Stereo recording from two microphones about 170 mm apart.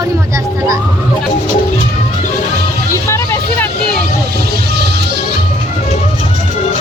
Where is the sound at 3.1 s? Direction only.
15° left (ahead or behind).